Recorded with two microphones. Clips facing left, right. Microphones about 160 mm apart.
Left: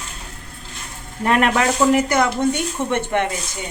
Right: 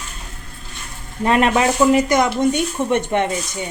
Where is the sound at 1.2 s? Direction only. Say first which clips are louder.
Right 2 dB; 20° right (ahead or behind).